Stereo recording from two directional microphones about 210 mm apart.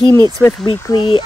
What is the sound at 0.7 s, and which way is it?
Speech, 20° left (ahead or behind).